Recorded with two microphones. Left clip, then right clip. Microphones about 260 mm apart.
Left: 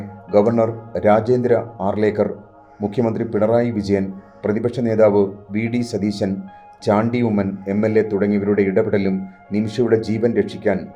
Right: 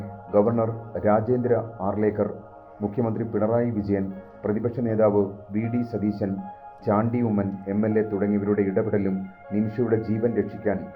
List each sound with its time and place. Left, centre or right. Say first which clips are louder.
0.3 s speech: left 6 dB; left